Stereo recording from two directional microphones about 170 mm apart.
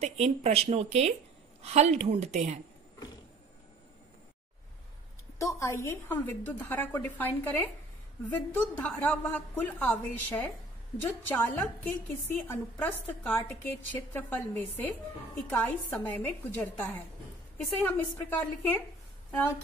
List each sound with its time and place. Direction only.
0.0 s speech: 40° right (ahead or behind)
5.4 s a woman's voice: 15° left (ahead or behind)